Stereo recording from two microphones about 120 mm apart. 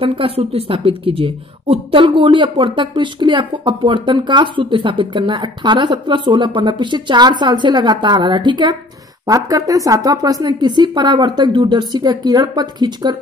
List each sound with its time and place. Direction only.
0.0 s speech: 55° right (ahead or behind); by 13.2 s 35° right (ahead or behind)